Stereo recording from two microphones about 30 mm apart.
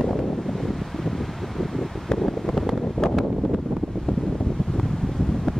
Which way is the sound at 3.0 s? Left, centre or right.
Left.